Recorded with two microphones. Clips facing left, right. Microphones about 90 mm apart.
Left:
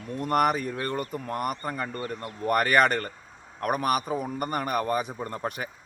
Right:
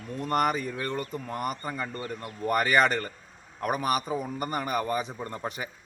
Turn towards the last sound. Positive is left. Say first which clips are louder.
# left 2 dB
turn(degrees=0)  # may be behind; listen again after turning